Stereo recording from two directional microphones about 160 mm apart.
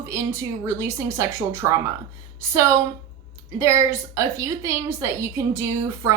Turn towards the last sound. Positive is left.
turn(degrees=-20)  # may be behind; listen again after turning